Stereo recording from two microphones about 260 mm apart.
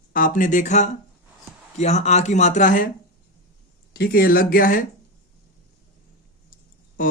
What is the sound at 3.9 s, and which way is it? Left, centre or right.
Speech, left.